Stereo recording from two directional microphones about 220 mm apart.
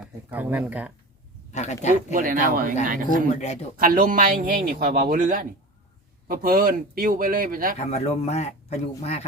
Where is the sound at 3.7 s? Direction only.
40° right (ahead or behind).